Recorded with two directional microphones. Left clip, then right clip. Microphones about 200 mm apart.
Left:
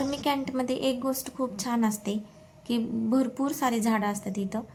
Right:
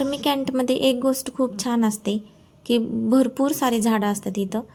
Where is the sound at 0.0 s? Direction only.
25° right (ahead or behind).